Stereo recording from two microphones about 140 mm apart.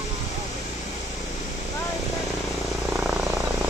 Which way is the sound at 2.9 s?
5° right (ahead or behind).